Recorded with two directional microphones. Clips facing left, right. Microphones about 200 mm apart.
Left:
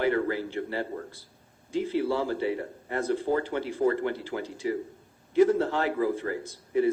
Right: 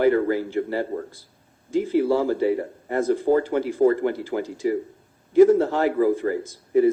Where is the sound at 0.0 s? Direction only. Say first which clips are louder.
Right 7 dB; 45° right (ahead or behind).